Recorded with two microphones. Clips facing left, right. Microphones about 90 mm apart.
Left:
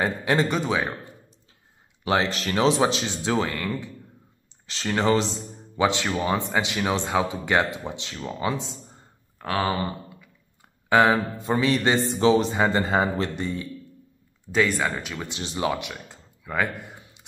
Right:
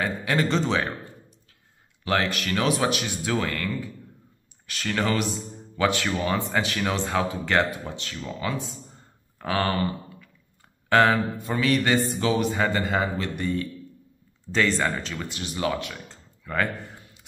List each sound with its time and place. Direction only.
0.0 s speech: 25° left (ahead or behind)
0.5 s speech: 10° left (ahead or behind)
2.0 s speech: 25° left (ahead or behind)
9.4 s speech: centre (ahead or behind)
10.9 s speech: 15° left (ahead or behind)
11.1 s speech: 25° left (ahead or behind)
14.4 s speech: 10° left (ahead or behind)
15.2 s a sound: 25° left (ahead or behind)